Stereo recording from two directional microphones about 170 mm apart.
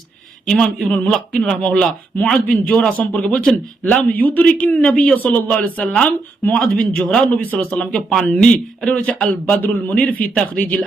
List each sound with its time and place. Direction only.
0.4 s a man's voice: 5° left (ahead or behind)